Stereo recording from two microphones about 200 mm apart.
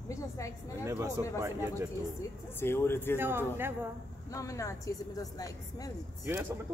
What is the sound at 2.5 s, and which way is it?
Speech, 10° left (ahead or behind).